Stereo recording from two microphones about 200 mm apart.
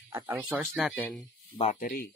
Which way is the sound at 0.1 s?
5° right (ahead or behind).